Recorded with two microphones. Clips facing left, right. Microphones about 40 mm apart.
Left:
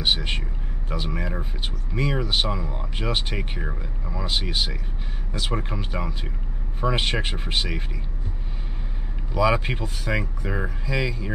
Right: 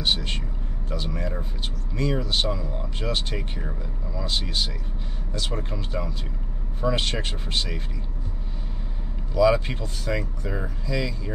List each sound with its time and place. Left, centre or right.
0.0 s speech: left
9.3 s speech: centre